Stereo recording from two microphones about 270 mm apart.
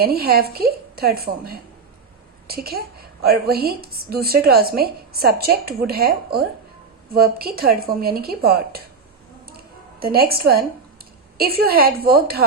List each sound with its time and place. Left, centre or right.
0.0 s a woman's voice: right
10.0 s a woman's voice: right